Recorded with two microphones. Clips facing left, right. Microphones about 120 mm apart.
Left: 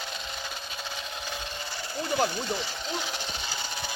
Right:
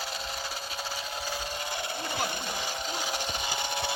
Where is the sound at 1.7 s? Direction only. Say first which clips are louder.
Right 3 dB; 60° right (ahead or behind).